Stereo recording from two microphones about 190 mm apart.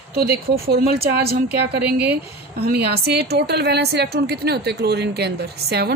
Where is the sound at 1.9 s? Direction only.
10° right (ahead or behind).